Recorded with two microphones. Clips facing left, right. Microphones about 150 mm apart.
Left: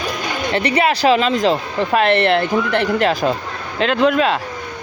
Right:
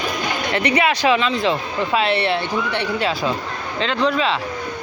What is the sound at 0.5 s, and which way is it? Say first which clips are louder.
Speech: left 2 dB; 35° left (ahead or behind).